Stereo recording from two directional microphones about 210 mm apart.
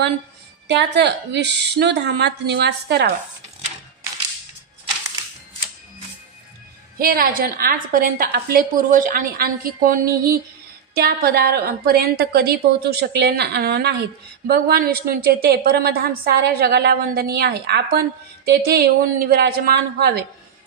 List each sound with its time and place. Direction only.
0.7 s a woman's voice: 55° right (ahead or behind)
7.0 s a woman's voice: 45° right (ahead or behind)